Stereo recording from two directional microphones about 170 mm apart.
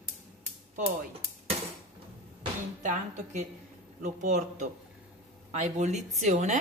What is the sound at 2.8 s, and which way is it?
Speech, 45° right (ahead or behind).